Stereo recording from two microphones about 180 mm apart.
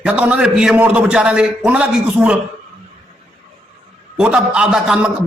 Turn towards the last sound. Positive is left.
turn(degrees=-5)  # may be behind; listen again after turning